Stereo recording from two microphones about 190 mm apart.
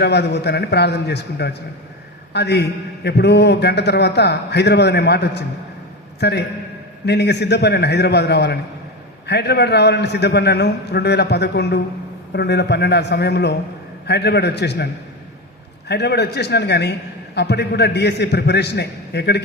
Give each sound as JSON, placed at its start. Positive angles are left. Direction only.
{"t": 0.0, "sound": "a man's voice", "side_deg": 60}
{"t": 15.9, "sound": "a man's voice", "side_deg": 60}